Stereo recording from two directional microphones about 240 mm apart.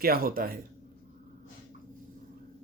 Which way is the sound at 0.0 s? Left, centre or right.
Right.